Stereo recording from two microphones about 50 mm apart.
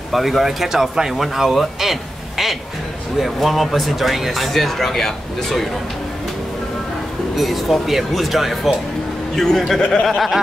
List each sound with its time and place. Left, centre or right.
0.1 s a man's voice: centre
7.3 s speech: centre
9.3 s a man's voice: centre
9.8 s speech: left
10.0 s speech: centre